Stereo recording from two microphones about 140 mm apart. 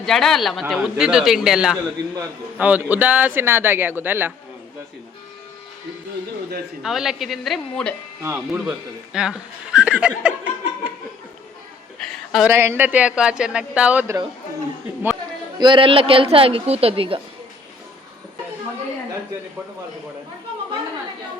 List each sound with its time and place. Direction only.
0.0 s speech: centre (ahead or behind); by 4.3 s 15° right (ahead or behind)
6.8 s speech: 5° right (ahead or behind)
8.2 s speech: 15° right (ahead or behind)
9.1 s speech: 5° right (ahead or behind)
11.9 s a sound: 5° left (ahead or behind)
12.5 s speech: 15° right (ahead or behind)
15.5 s a woman's voice: 35° right (ahead or behind)